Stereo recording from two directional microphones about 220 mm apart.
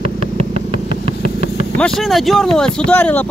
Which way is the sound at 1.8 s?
Centre (ahead or behind).